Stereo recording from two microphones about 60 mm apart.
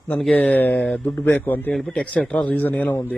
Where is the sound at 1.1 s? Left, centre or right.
Left.